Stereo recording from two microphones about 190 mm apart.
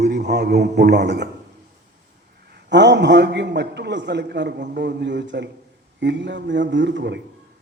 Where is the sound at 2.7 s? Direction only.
65° right (ahead or behind).